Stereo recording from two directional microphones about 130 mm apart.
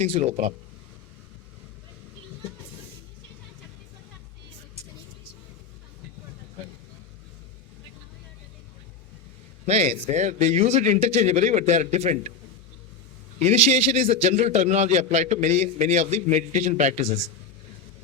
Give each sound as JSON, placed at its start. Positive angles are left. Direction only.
{"t": 0.0, "sound": "a man's voice", "side_deg": -55}
{"t": 9.6, "sound": "a man's voice", "side_deg": -55}
{"t": 13.4, "sound": "a man's voice", "side_deg": -60}